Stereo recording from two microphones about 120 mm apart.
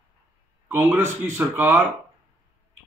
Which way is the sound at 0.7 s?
20° right (ahead or behind).